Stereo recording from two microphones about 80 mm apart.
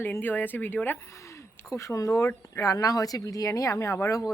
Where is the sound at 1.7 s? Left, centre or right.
Left.